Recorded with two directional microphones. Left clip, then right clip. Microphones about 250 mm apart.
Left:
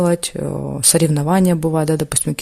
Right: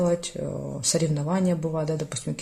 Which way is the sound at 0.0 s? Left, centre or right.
Left.